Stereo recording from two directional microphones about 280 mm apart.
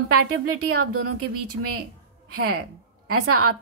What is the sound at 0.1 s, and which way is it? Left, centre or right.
A woman's voice, right.